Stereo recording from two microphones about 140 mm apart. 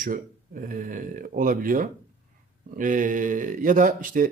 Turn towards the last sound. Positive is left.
turn(degrees=-75)  # may be behind; listen again after turning